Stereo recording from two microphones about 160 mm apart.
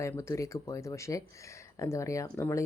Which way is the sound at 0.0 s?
20° left (ahead or behind).